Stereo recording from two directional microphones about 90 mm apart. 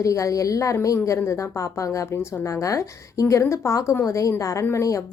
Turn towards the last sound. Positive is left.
turn(degrees=35)  # may be behind; listen again after turning